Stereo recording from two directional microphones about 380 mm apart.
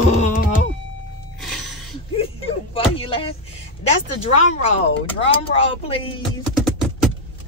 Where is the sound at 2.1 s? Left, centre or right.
Centre.